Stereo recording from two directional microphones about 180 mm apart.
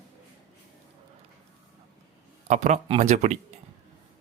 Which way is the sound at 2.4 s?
40° right (ahead or behind).